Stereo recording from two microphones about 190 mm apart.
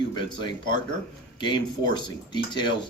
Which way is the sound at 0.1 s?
25° left (ahead or behind).